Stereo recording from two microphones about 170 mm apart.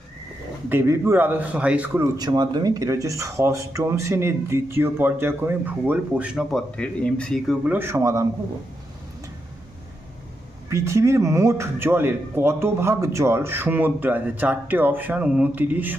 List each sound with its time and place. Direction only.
0.7 s speech: 15° right (ahead or behind)
2.1 s speech: 25° right (ahead or behind); by 7.7 s centre (ahead or behind)
7.7 s speech: 15° right (ahead or behind)
10.7 s speech: 15° right (ahead or behind)